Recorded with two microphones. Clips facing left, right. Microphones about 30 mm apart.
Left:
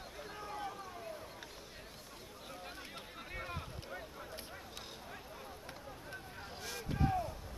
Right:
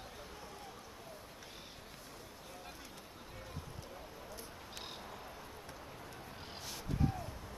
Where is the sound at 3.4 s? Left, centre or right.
Left.